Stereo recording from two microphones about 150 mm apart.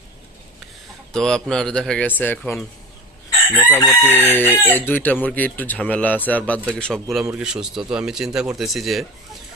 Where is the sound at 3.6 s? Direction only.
15° left (ahead or behind).